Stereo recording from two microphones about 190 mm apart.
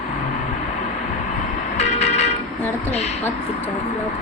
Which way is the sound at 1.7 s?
35° left (ahead or behind).